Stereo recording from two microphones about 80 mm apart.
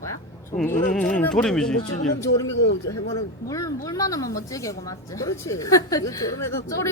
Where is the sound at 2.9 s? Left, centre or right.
Left.